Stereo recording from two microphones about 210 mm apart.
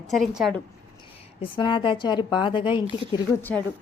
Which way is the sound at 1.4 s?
25° left (ahead or behind).